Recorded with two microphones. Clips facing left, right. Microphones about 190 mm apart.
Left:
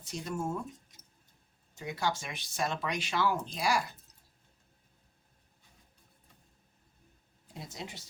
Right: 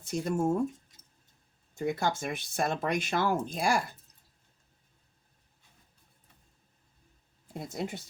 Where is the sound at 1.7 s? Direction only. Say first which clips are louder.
Right 4 dB; 50° right (ahead or behind).